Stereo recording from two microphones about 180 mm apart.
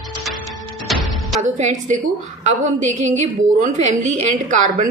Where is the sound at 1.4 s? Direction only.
40° right (ahead or behind).